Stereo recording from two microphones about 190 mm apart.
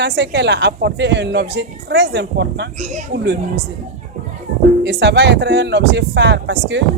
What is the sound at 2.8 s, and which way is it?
Speech, 40° right (ahead or behind).